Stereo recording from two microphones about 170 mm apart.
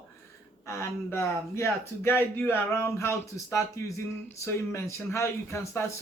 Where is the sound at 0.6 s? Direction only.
15° left (ahead or behind).